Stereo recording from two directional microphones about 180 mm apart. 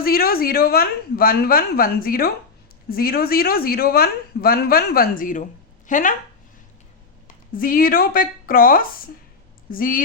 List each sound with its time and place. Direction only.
0.0 s a woman's voice: 55° left (ahead or behind)
7.5 s a woman's voice: 50° left (ahead or behind)